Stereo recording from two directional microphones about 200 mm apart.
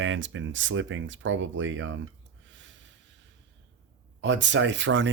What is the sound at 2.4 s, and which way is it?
Snort, 65° right (ahead or behind).